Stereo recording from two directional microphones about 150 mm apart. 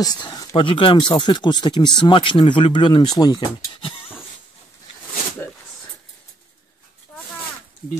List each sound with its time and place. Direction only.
0.0 s speech: 25° left (ahead or behind)